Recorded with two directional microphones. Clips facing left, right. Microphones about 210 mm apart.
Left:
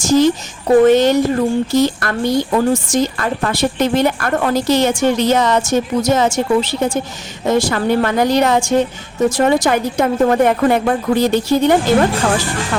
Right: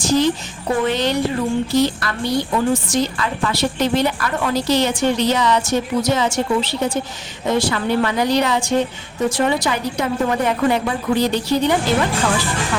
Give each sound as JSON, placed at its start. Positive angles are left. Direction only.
{"t": 0.0, "sound": "speech", "side_deg": 45}